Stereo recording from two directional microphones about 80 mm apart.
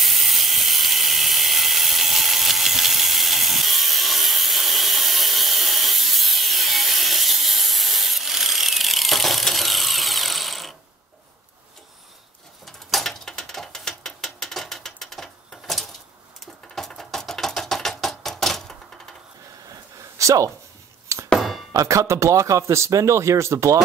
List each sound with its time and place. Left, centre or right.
0.0 s steam: centre
12.6 s mechanisms: centre
16.7 s typewriter: centre
19.7 s a sound: right
21.3 s a sound: centre
21.7 s speech: right